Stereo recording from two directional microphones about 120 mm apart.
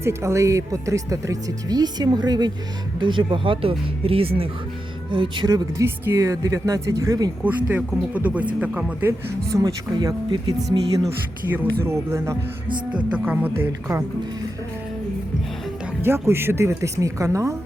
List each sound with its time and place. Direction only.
0.0 s speech: 25° right (ahead or behind)
7.4 s speech: 15° right (ahead or behind)
9.6 s speech: 30° right (ahead or behind)
11.5 s speech: 20° right (ahead or behind)
12.6 s speech: 40° right (ahead or behind)
13.1 s speech: 15° right (ahead or behind)
16.0 s speech: 20° right (ahead or behind)